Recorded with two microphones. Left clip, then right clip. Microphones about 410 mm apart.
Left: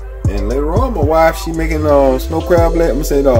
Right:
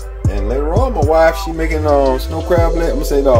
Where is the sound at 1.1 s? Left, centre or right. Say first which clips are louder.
Left 1 dB; left.